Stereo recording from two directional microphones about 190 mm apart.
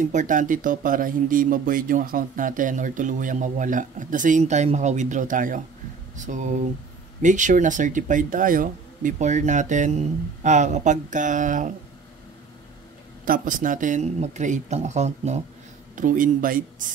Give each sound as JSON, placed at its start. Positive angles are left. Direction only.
{"t": 0.0, "sound": "speech", "side_deg": -40}
{"t": 13.2, "sound": "speech", "side_deg": -45}